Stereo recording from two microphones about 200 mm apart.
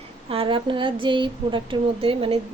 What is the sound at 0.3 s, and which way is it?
A woman's voice, 25° right (ahead or behind).